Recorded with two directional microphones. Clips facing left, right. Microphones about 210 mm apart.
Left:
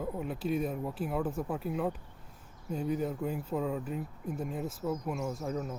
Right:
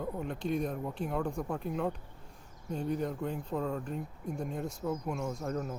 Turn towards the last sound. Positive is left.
turn(degrees=0)  # may be behind; listen again after turning